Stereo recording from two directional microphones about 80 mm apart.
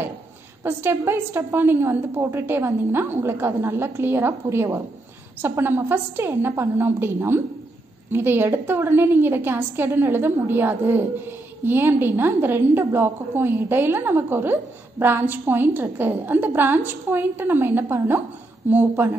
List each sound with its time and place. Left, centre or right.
0.7 s a woman's voice: right